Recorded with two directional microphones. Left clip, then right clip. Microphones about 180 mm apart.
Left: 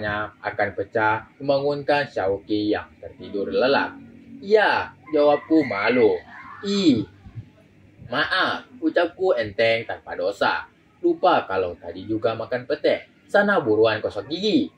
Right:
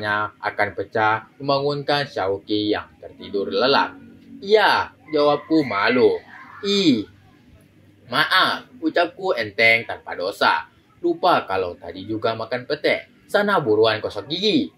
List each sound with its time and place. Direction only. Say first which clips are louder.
0.0 s speech: right 4 dB; 25° right (ahead or behind)
8.1 s speech: right 4 dB; 25° right (ahead or behind)